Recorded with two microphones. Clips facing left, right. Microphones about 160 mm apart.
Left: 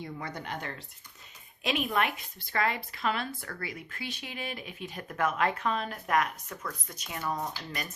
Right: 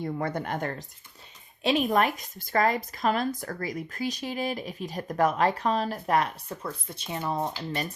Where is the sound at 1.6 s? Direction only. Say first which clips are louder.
Right 6 dB; 35° right (ahead or behind).